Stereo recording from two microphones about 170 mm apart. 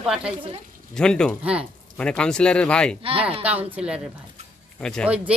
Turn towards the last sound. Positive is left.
turn(degrees=5)  # may be behind; listen again after turning